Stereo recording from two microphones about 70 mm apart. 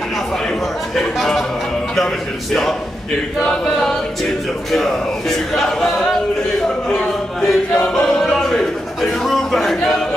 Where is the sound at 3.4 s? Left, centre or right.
Centre.